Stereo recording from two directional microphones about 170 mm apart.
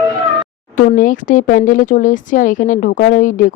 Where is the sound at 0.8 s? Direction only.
50° left (ahead or behind).